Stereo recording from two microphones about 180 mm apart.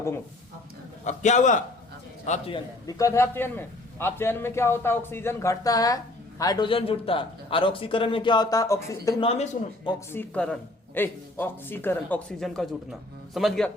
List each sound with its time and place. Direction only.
1.0 s a man's voice: 40° left (ahead or behind)
2.8 s a man's voice: 15° left (ahead or behind)
9.2 s speech: 35° left (ahead or behind)
10.1 s a man's voice: 10° left (ahead or behind)
12.4 s speech: centre (ahead or behind)